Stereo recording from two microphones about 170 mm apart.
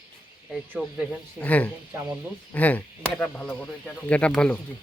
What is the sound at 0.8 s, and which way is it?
Speech, 5° right (ahead or behind).